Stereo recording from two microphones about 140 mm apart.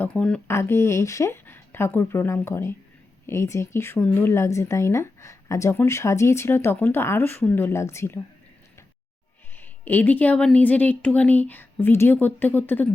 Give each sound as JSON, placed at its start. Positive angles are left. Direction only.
{"t": 0.0, "sound": "a woman's voice", "side_deg": 10}
{"t": 0.4, "sound": "a woman's voice", "side_deg": 20}
{"t": 9.6, "sound": "a woman's voice", "side_deg": 15}